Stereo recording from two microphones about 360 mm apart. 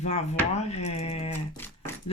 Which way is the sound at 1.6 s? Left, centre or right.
Centre.